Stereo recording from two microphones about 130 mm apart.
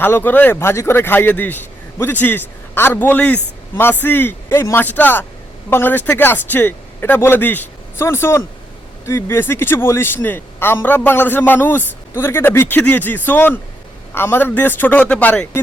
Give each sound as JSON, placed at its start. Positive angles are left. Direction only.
{"t": 0.0, "sound": "a man's voice", "side_deg": 15}